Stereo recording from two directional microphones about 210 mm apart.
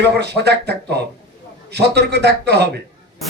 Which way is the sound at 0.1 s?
50° right (ahead or behind).